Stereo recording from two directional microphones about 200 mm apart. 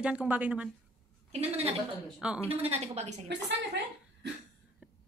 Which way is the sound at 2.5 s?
30° right (ahead or behind).